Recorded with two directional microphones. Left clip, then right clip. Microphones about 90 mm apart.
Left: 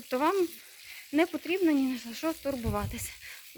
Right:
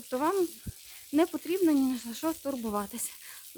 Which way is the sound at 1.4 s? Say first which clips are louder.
Left 1 dB; 45° right (ahead or behind).